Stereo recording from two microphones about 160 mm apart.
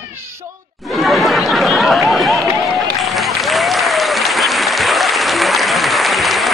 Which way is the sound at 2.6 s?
Centre (ahead or behind).